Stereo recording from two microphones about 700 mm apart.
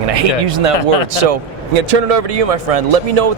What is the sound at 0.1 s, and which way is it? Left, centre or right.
Speech, right.